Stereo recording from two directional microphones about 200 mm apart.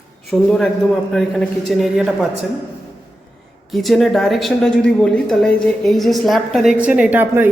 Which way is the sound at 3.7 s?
Centre (ahead or behind).